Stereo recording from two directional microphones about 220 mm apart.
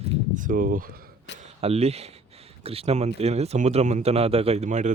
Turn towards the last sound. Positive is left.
turn(degrees=-35)  # may be behind; listen again after turning